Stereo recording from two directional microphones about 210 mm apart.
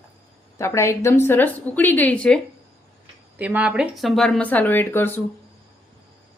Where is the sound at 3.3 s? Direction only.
5° right (ahead or behind); by 5.2 s 10° left (ahead or behind).